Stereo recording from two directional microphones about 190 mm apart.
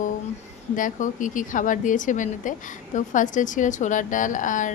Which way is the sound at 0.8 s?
45° left (ahead or behind).